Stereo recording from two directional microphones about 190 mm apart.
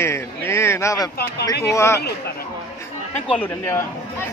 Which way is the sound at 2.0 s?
60° left (ahead or behind).